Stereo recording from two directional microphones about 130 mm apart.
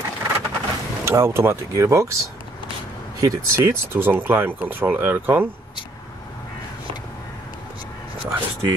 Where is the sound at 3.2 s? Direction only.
20° right (ahead or behind).